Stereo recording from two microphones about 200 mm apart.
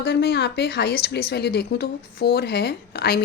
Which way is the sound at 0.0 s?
55° left (ahead or behind).